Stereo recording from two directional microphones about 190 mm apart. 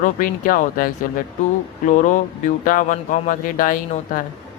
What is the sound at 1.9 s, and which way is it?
Speech, 40° left (ahead or behind).